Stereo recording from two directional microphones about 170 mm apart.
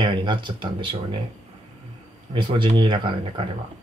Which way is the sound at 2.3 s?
30° right (ahead or behind).